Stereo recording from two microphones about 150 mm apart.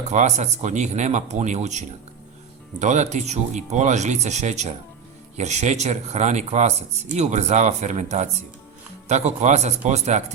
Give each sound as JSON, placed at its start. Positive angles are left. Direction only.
{"t": 0.1, "sound": "speech", "side_deg": -50}